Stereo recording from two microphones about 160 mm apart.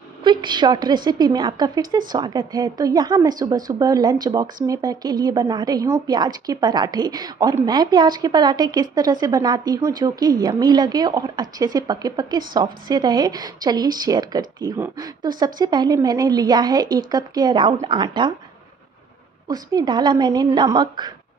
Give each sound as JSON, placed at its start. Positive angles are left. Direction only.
{"t": 0.2, "sound": "a woman's voice", "side_deg": -30}
{"t": 19.4, "sound": "a woman's voice", "side_deg": -25}